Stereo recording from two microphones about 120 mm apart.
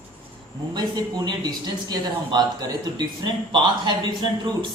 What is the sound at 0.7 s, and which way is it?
A man's voice, 35° right (ahead or behind).